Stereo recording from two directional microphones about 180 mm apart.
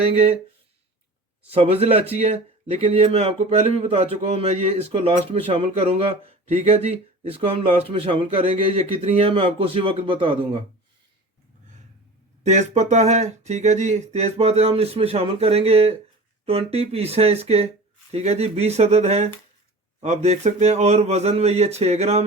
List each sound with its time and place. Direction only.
0.0 s speech: 35° right (ahead or behind)
1.5 s speech: 35° right (ahead or behind)
12.4 s speech: 40° right (ahead or behind)